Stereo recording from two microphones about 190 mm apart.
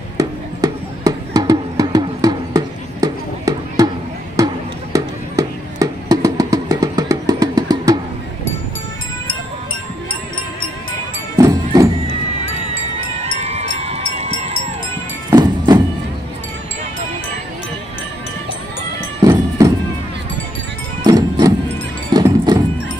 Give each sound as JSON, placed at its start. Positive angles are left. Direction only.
{"t": 0.2, "sound": "music", "side_deg": -20}
{"t": 4.4, "sound": "a sound", "side_deg": -20}
{"t": 4.9, "sound": "music", "side_deg": -20}
{"t": 11.3, "sound": "music", "side_deg": -20}
{"t": 13.2, "sound": "music", "side_deg": -35}
{"t": 13.7, "sound": "a sound", "side_deg": -35}
{"t": 15.2, "sound": "music", "side_deg": -20}
{"t": 19.2, "sound": "music", "side_deg": -20}
{"t": 21.0, "sound": "music", "side_deg": -20}